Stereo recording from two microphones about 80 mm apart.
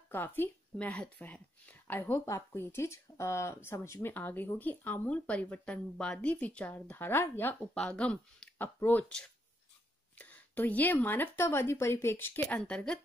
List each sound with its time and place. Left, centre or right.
0.1 s speech: left
2.1 s speech: left
2.5 s speech: left
4.1 s speech: left
7.7 s speech: centre
10.1 s speech: left
12.4 s speech: centre